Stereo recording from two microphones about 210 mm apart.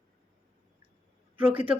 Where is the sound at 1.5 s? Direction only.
25° right (ahead or behind).